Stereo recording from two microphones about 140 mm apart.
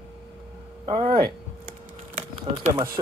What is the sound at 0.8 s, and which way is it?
Speech, 40° right (ahead or behind).